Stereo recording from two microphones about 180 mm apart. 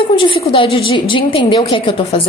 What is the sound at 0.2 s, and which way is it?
A woman's voice, 30° left (ahead or behind).